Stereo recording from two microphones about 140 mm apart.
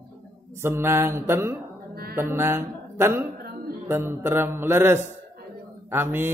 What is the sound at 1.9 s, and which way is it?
Mantra, 90° right.